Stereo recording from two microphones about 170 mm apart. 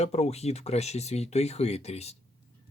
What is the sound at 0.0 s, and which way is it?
Speech, 40° left (ahead or behind).